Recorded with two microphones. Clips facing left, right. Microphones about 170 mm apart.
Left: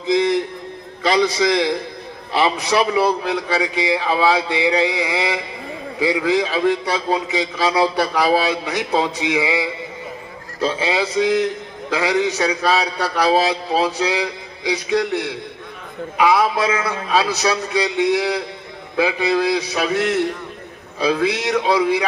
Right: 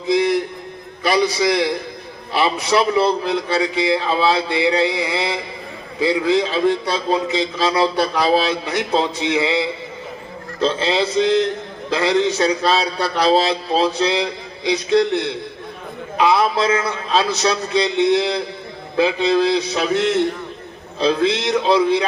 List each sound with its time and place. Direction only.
0.1 s a sound: 20° left (ahead or behind)
1.0 s a man's voice: 20° left (ahead or behind)
21.2 s a man's voice: 10° left (ahead or behind)